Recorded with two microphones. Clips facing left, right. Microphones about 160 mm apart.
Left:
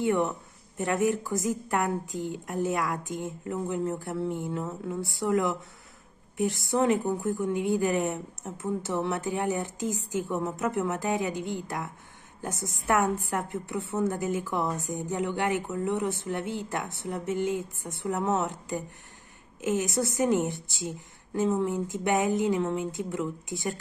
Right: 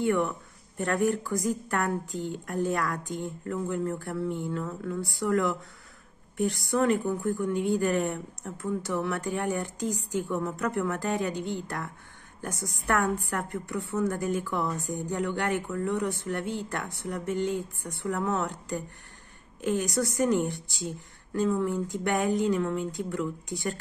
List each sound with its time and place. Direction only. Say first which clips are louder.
0.0 s speech: even; 20° left (ahead or behind)
12.4 s speech: left 1 dB; 25° left (ahead or behind)